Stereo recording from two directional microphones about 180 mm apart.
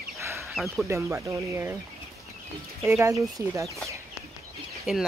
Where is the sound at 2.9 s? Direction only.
15° right (ahead or behind).